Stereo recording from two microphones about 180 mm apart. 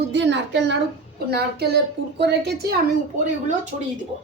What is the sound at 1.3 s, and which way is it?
A woman's voice, 60° right (ahead or behind).